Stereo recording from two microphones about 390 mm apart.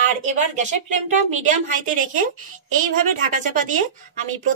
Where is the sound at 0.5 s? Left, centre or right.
Centre.